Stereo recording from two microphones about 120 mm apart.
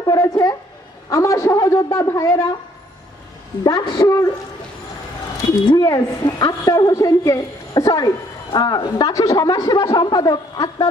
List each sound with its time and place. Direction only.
0.0 s a woman's voice: 30° left (ahead or behind)
3.6 s a woman's voice: 35° left (ahead or behind)
5.7 s a woman's voice: 35° left (ahead or behind)